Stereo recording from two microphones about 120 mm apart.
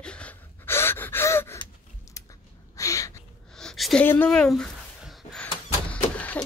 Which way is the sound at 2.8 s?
25° left (ahead or behind).